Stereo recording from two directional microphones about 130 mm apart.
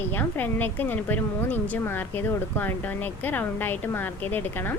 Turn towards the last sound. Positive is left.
turn(degrees=15)  # may be behind; listen again after turning